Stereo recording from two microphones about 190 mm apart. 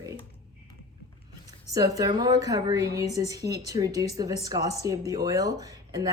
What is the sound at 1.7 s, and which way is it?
A woman's voice, 20° right (ahead or behind).